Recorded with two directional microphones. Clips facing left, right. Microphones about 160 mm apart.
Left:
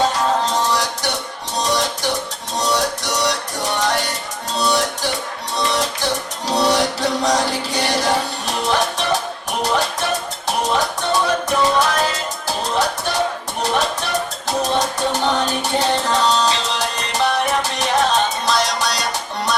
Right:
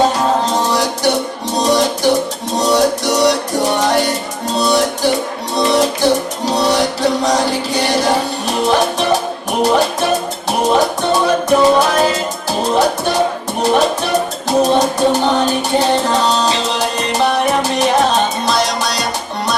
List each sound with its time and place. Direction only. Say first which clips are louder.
0.0 s music: right 4 dB; 10° right (ahead or behind)